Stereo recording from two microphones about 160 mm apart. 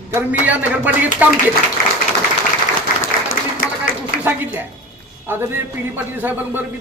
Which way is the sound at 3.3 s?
60° left (ahead or behind).